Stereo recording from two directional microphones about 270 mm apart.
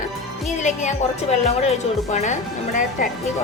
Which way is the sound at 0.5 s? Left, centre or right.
Left.